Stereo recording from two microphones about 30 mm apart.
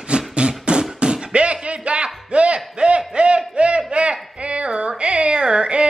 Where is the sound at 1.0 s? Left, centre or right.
Right.